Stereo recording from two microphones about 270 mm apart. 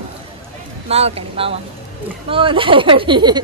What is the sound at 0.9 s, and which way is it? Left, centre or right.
A woman's voice, right.